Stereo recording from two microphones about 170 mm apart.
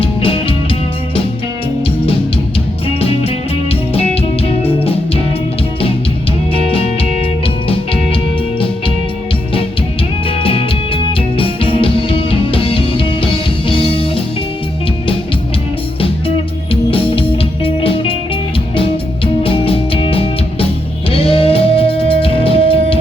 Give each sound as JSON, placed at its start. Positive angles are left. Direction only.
{"t": 0.0, "sound": "music", "side_deg": 35}
{"t": 3.0, "sound": "music", "side_deg": 35}
{"t": 6.5, "sound": "music", "side_deg": 35}
{"t": 10.2, "sound": "music", "side_deg": 35}
{"t": 16.9, "sound": "music", "side_deg": 35}